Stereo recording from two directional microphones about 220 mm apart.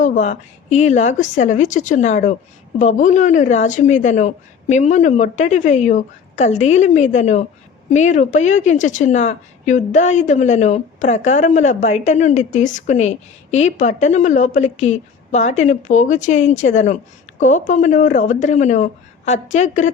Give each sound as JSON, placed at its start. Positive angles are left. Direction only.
{"t": 0.0, "sound": "a woman's voice", "side_deg": 35}